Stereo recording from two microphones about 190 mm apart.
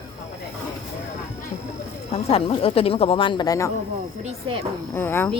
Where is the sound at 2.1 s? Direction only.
30° left (ahead or behind).